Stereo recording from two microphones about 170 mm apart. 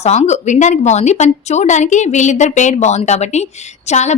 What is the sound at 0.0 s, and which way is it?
A woman's voice, 40° left (ahead or behind).